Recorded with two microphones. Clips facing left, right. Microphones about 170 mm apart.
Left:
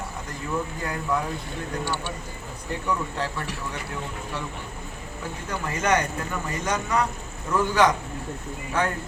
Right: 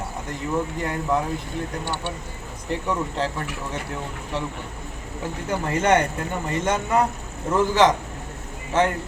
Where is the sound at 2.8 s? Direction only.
20° right (ahead or behind).